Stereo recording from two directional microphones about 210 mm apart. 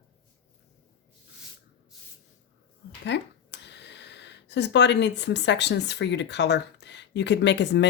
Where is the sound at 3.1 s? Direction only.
55° left (ahead or behind).